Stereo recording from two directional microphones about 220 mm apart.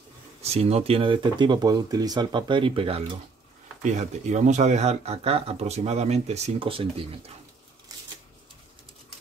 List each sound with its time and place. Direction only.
0.4 s speech: 30° right (ahead or behind)